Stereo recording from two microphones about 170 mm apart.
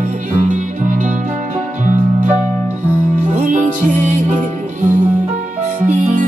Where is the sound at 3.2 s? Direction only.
45° right (ahead or behind).